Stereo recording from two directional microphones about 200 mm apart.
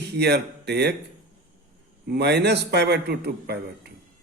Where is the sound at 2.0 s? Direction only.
55° right (ahead or behind).